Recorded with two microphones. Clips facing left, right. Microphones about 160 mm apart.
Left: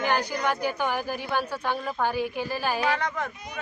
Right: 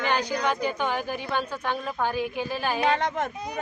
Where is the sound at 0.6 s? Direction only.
10° left (ahead or behind).